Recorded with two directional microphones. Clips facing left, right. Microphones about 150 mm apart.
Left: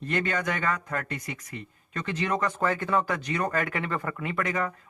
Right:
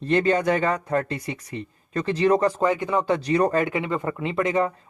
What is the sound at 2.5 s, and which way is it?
Speech, 15° right (ahead or behind).